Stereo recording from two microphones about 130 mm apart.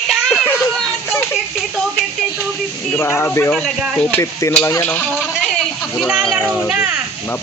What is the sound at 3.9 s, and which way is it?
Stir, 20° left (ahead or behind).